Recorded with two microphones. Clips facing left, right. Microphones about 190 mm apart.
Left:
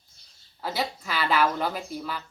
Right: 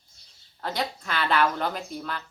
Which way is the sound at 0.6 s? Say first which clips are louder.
Even; 5° left (ahead or behind).